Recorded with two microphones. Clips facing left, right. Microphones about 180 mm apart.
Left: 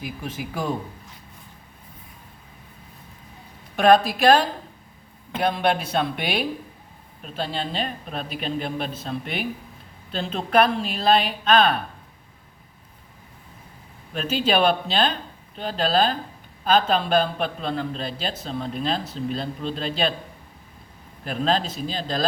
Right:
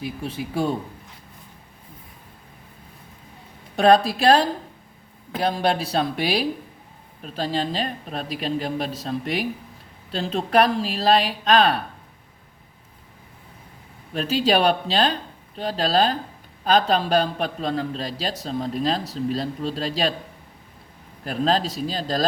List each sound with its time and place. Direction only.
0.0 s a man's voice: 30° right (ahead or behind)
3.8 s a man's voice: 30° right (ahead or behind)
14.1 s a man's voice: 35° right (ahead or behind)
21.2 s a man's voice: 35° right (ahead or behind)